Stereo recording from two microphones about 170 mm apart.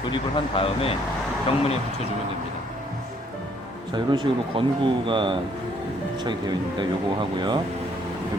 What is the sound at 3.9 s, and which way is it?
Speech, 25° right (ahead or behind).